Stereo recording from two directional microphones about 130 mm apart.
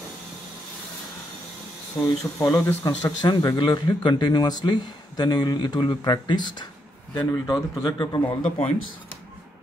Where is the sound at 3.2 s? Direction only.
30° left (ahead or behind).